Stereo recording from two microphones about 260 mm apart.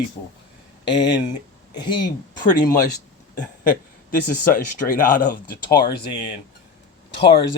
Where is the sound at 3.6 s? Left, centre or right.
Left.